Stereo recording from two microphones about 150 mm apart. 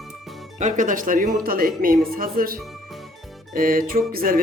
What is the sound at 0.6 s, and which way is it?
Speech, 60° right (ahead or behind).